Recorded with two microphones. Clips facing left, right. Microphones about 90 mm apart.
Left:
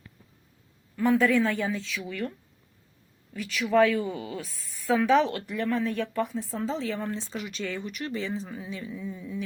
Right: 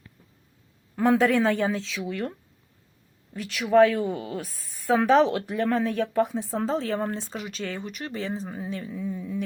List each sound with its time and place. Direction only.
0.9 s speech: 85° right
2.0 s speech: 45° right (ahead or behind)
3.3 s speech: 45° right (ahead or behind)
3.8 s speech: 25° right (ahead or behind)
4.1 s speech: 40° right (ahead or behind)
5.5 s speech: 60° right (ahead or behind)
6.3 s speech: 70° right (ahead or behind)
6.6 s speech: 50° right (ahead or behind)